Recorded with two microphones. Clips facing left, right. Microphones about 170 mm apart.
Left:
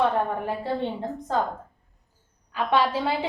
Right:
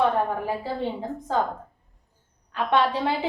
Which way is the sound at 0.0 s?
Centre (ahead or behind).